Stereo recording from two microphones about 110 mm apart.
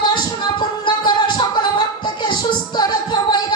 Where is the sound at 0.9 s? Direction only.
40° left (ahead or behind).